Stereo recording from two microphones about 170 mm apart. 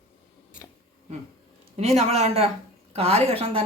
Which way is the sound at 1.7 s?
40° right (ahead or behind).